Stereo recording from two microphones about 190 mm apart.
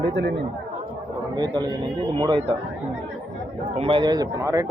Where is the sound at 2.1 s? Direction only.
20° right (ahead or behind).